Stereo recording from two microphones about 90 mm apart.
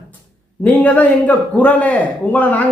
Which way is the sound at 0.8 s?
15° left (ahead or behind).